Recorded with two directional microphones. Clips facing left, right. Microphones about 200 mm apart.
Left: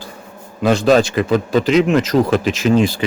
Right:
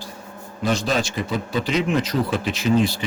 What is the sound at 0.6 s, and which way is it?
Speech, 90° left.